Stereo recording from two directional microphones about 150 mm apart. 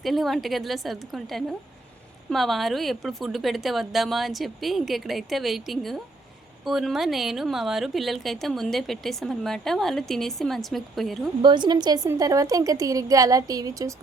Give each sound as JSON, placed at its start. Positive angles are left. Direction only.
{"t": 0.0, "sound": "speech", "side_deg": 0}
{"t": 11.4, "sound": "a woman's voice", "side_deg": -30}